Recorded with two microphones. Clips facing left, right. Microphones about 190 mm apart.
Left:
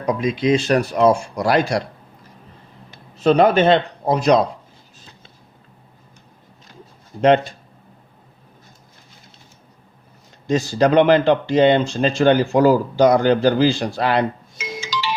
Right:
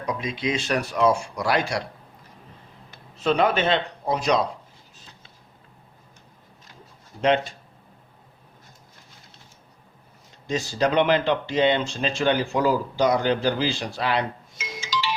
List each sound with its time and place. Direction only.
0.0 s speech: 45° left (ahead or behind)
3.2 s speech: 40° left (ahead or behind)
7.2 s speech: 50° left (ahead or behind)
10.5 s speech: 45° left (ahead or behind)
14.8 s marimba: 65° left (ahead or behind)